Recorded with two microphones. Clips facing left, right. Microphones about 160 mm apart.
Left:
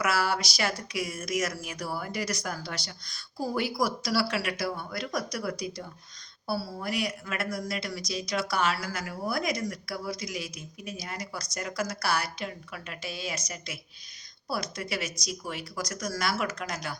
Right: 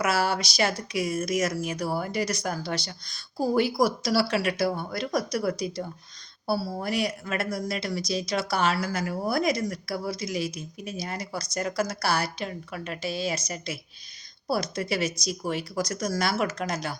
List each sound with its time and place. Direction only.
0.0 s speech: 25° right (ahead or behind)